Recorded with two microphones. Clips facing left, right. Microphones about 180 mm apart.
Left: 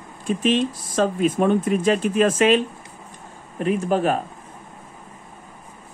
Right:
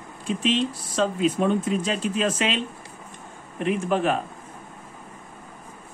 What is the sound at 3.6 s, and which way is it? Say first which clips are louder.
Speech: left 3 dB; 40° left (ahead or behind).